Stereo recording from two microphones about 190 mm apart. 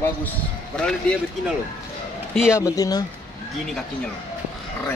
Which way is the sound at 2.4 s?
15° left (ahead or behind).